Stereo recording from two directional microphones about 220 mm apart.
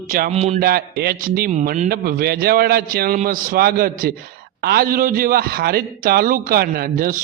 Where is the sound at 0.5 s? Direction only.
45° right (ahead or behind).